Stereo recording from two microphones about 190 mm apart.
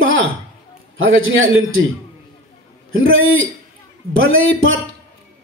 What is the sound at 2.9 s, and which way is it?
Speech, 90° right.